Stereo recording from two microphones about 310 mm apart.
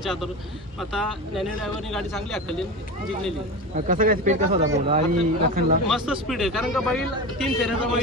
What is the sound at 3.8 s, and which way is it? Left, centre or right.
Speech, right.